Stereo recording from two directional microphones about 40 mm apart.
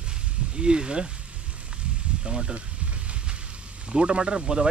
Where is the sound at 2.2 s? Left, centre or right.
Centre.